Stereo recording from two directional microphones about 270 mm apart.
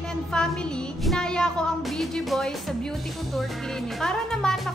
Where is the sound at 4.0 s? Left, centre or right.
Centre.